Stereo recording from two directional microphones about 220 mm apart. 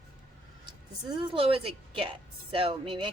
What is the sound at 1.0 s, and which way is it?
A woman's voice, 20° right (ahead or behind).